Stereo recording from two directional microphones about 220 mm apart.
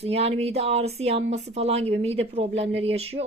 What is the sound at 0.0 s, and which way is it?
Speech, 30° right (ahead or behind).